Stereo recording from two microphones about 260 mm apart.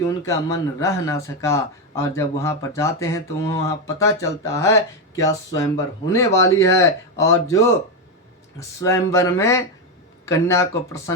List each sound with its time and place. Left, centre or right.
0.3 s a man's voice: centre